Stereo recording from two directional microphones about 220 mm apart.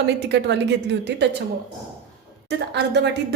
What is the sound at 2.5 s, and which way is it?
Speech, 50° right (ahead or behind).